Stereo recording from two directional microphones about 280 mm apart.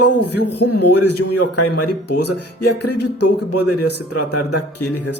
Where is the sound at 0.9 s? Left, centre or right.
Left.